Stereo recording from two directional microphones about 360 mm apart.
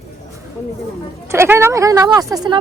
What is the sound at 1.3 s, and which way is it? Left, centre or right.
Speech, centre.